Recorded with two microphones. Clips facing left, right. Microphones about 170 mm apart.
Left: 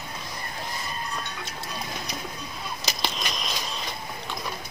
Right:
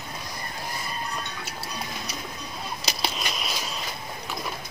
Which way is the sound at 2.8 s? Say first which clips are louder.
Even; centre (ahead or behind).